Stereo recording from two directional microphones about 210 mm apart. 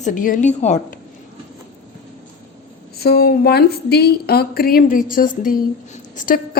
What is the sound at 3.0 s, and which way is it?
A woman's voice, 50° left (ahead or behind).